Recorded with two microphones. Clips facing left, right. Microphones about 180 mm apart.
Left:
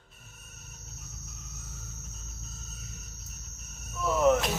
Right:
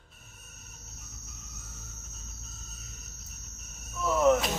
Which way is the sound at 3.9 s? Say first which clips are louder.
Even; centre (ahead or behind).